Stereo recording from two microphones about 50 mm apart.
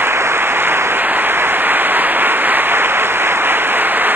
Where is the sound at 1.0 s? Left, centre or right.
Right.